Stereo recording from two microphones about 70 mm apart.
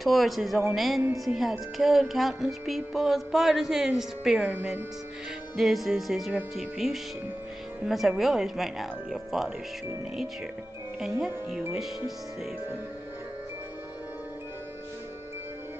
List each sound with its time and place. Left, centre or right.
0.0 s speech: centre
5.6 s speech: centre
11.0 s speech: centre